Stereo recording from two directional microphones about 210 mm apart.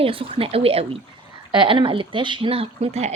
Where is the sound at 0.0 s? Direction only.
25° right (ahead or behind).